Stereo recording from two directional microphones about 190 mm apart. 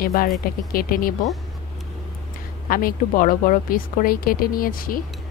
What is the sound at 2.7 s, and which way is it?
A woman's voice, 50° left (ahead or behind).